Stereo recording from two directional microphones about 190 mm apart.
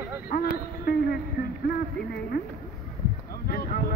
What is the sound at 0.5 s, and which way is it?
Speech, 50° left (ahead or behind).